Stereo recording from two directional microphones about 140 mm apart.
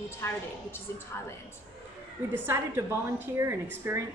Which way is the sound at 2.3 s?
15° right (ahead or behind).